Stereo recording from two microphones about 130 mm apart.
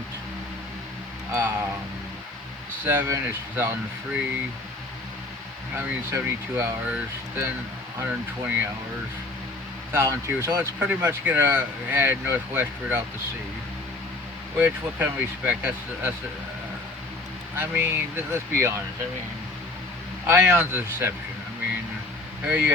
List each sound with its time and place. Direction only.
1.3 s speech: 15° right (ahead or behind)
2.8 s speech: 15° right (ahead or behind)
5.7 s speech: 20° right (ahead or behind)
9.9 s speech: 20° right (ahead or behind)
14.6 s speech: 15° right (ahead or behind)
17.6 s speech: 20° right (ahead or behind)
20.2 s speech: 20° right (ahead or behind)
22.4 s speech: 15° right (ahead or behind)